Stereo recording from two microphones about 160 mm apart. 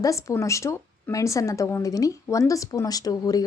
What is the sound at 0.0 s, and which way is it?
A woman's voice, 20° left (ahead or behind).